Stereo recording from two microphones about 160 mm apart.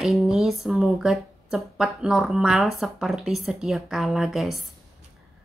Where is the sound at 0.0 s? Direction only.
Centre (ahead or behind).